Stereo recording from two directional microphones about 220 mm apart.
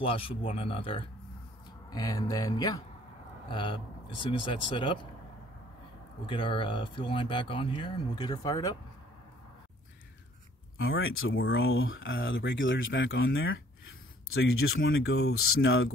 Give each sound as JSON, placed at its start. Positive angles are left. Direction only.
{"t": 0.0, "sound": "speech", "side_deg": 25}
{"t": 6.2, "sound": "speech", "side_deg": 20}
{"t": 10.8, "sound": "speech", "side_deg": 65}